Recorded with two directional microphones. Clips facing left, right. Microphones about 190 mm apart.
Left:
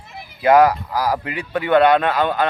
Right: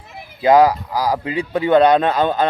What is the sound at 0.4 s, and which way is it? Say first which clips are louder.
Speech: right 1 dB; 15° right (ahead or behind).